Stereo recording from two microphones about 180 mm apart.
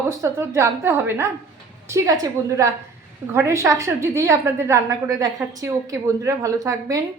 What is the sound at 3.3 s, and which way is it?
A woman's voice, 15° right (ahead or behind).